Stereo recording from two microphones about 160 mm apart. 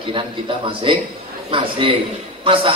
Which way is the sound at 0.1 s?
35° right (ahead or behind).